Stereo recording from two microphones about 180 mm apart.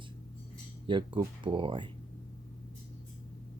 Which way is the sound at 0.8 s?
25° right (ahead or behind).